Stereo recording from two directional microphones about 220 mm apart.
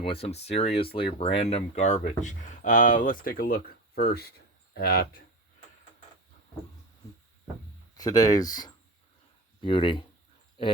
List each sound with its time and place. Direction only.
0.0 s speech: 25° left (ahead or behind); by 5.2 s 45° left (ahead or behind)
7.9 s speech: 15° left (ahead or behind)